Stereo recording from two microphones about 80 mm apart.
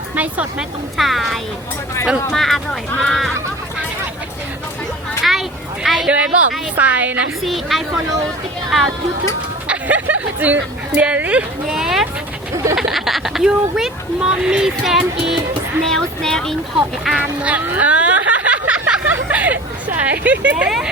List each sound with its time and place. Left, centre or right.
0.9 s speech: centre
5.2 s a sound: centre
6.1 s a woman's voice: centre
7.4 s speech: centre
9.6 s a sound: centre
10.9 s speech: centre
11.7 s speech: centre
15.9 s speech: centre
17.4 s a sound: centre